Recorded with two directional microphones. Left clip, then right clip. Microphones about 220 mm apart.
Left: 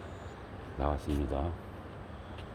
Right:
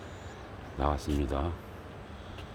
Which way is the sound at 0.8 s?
20° right (ahead or behind).